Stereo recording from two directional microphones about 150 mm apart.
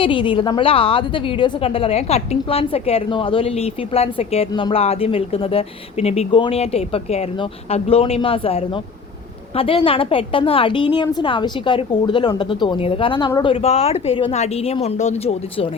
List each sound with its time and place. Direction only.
0.0 s a woman's voice: 35° left (ahead or behind)